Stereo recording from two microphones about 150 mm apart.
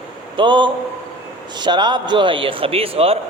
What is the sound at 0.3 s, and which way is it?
Speech, 30° right (ahead or behind).